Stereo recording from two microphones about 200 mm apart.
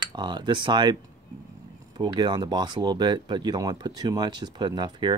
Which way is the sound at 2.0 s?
20° right (ahead or behind).